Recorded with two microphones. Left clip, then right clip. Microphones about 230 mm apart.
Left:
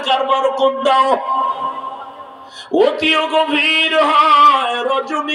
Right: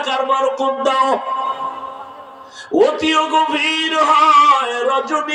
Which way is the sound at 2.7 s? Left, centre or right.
Left.